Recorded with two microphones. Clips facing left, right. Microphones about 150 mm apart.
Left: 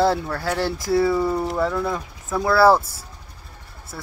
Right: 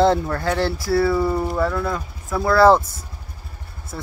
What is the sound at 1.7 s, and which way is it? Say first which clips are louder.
Speech: even; 10° left (ahead or behind).